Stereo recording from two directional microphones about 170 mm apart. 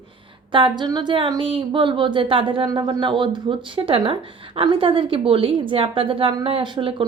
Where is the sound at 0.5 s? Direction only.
25° right (ahead or behind).